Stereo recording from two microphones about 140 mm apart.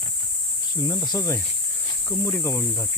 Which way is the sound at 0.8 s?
30° left (ahead or behind).